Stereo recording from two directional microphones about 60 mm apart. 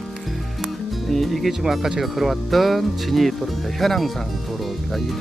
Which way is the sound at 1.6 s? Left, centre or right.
Centre.